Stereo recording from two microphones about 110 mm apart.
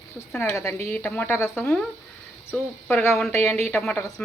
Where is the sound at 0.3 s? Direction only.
25° left (ahead or behind).